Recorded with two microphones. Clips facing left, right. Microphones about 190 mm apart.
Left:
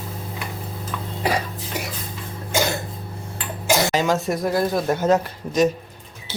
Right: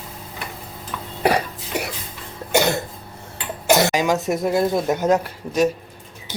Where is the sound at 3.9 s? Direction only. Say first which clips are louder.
Right 1 dB; 15° right (ahead or behind).